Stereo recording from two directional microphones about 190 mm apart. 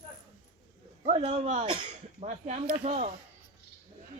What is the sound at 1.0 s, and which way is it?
Speech, 30° right (ahead or behind).